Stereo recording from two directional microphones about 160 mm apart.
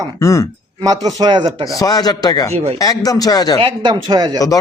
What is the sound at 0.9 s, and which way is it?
Speech, 25° right (ahead or behind).